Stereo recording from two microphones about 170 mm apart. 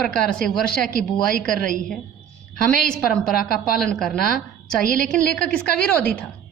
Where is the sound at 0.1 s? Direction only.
5° left (ahead or behind).